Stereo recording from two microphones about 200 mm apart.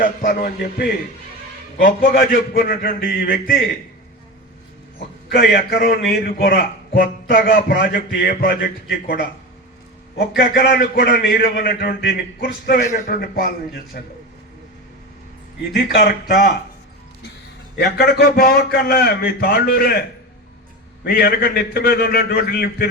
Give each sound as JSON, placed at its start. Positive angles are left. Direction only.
{"t": 0.0, "sound": "a man's voice", "side_deg": 45}
{"t": 5.3, "sound": "a man's voice", "side_deg": 50}
{"t": 12.8, "sound": "a man's voice", "side_deg": 40}
{"t": 16.0, "sound": "a man's voice", "side_deg": 45}
{"t": 17.7, "sound": "a man's voice", "side_deg": 55}
{"t": 21.0, "sound": "a man's voice", "side_deg": 50}